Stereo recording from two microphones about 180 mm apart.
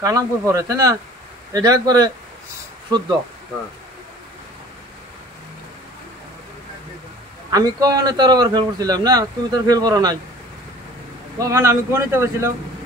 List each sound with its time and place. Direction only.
0.0 s speech: 20° right (ahead or behind)
7.5 s speech: 20° right (ahead or behind)
11.3 s speech: 20° right (ahead or behind)